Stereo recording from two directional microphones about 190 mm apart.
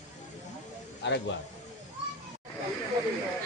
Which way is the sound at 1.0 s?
70° left (ahead or behind).